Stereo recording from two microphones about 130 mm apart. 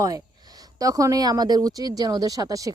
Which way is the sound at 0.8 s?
25° right (ahead or behind).